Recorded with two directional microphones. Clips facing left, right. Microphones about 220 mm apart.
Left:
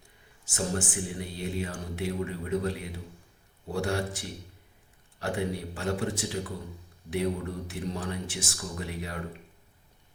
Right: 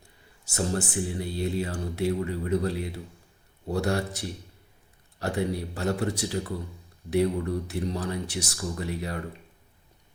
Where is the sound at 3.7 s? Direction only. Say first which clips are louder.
Right 3 dB; 40° right (ahead or behind).